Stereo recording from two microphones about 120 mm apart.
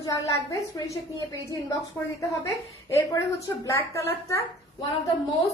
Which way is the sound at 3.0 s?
30° left (ahead or behind).